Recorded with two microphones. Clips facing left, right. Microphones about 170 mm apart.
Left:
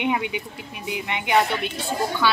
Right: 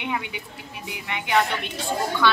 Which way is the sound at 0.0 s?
20° left (ahead or behind).